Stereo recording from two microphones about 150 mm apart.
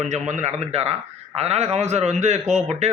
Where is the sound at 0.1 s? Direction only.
50° right (ahead or behind).